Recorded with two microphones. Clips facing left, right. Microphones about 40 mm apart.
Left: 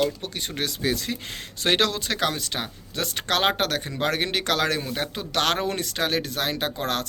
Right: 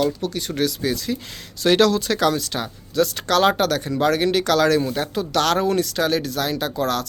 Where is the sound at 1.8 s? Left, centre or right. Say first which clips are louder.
Right 6 dB; centre.